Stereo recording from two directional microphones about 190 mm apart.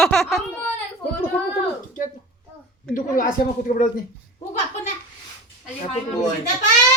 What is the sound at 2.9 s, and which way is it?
Speech, 45° left (ahead or behind).